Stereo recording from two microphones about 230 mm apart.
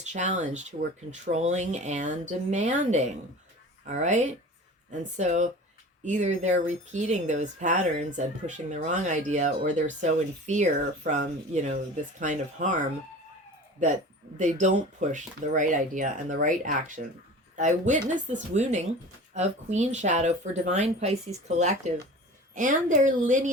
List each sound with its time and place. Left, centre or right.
0.0 s speech: right
14.3 s speech: right